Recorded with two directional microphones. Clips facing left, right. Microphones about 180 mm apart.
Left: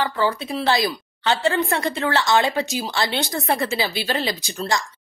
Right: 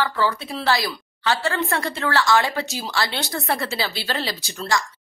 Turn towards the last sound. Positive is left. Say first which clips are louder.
# even
turn(degrees=20)  # may be behind; listen again after turning